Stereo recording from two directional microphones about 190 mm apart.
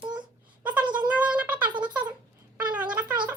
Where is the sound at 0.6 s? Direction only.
5° right (ahead or behind).